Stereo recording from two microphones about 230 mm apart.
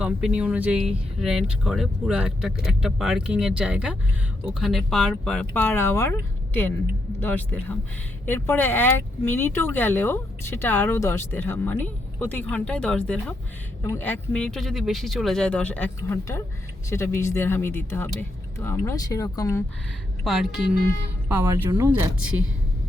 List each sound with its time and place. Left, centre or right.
0.0 s speech: centre
20.2 s speech: centre
21.4 s speech: centre